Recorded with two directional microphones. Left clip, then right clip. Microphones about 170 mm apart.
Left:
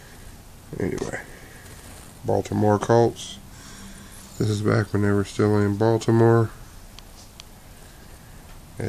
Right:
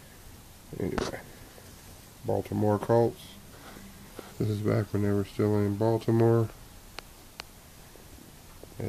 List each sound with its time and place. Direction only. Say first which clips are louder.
0.7 s speech: left 4 dB; 5° right (ahead or behind)
2.2 s speech: left 7 dB; centre (ahead or behind)
4.4 s speech: left 6 dB; 5° right (ahead or behind)